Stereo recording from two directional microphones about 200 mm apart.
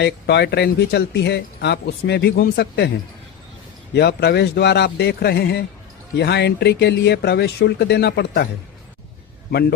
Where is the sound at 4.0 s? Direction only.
55° left (ahead or behind).